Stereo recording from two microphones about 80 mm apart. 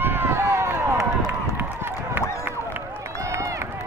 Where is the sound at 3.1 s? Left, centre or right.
Right.